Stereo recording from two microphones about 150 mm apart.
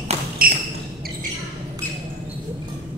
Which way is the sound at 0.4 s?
75° right (ahead or behind).